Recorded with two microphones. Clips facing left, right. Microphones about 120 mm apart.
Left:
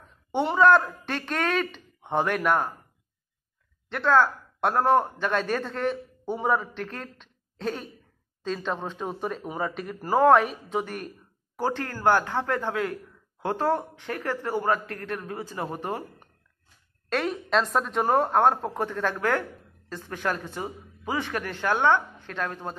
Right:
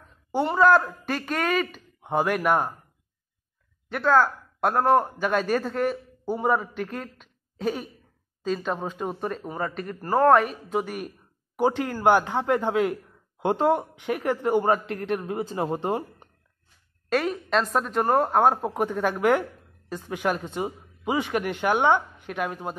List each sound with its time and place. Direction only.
0.3 s a man's voice: centre (ahead or behind)
3.9 s a man's voice: centre (ahead or behind)
11.5 s speech: 15° right (ahead or behind)
17.1 s a man's voice: centre (ahead or behind)